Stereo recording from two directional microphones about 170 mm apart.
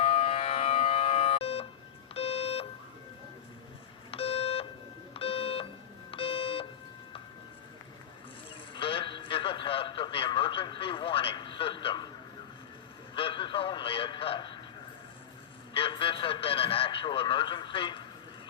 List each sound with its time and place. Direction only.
0.0 s siren: 40° left (ahead or behind)
2.1 s beep: 35° left (ahead or behind)
4.1 s beep: 35° left (ahead or behind)
5.1 s a sound: 35° left (ahead or behind)
6.1 s beep: 30° left (ahead or behind)
8.7 s radio: 30° left (ahead or behind)
13.1 s radio: 30° left (ahead or behind)
15.7 s radio: 30° left (ahead or behind)